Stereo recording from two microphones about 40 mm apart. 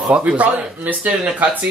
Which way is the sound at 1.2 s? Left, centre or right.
Right.